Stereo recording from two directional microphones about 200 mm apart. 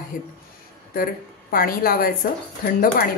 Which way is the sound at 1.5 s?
45° left (ahead or behind).